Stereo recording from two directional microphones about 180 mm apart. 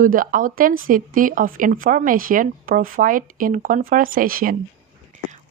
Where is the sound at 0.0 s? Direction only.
50° right (ahead or behind).